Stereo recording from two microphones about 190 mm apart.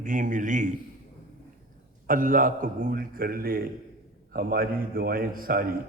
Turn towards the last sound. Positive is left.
turn(degrees=-50)  # may be behind; listen again after turning